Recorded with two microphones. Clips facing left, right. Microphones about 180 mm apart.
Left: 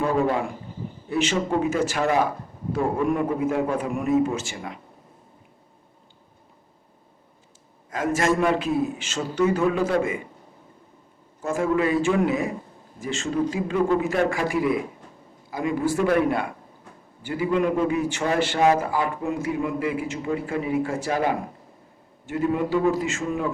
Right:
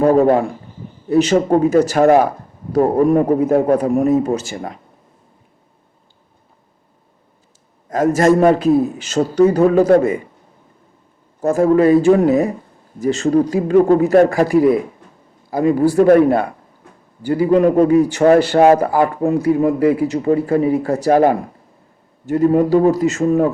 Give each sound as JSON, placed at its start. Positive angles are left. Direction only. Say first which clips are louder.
{"t": 0.0, "sound": "a man's voice", "louder": "right 10 dB", "side_deg": -40}
{"t": 7.9, "sound": "a man's voice", "louder": "right 9 dB", "side_deg": -40}
{"t": 11.3, "sound": "a man's voice", "louder": "right 10 dB", "side_deg": -40}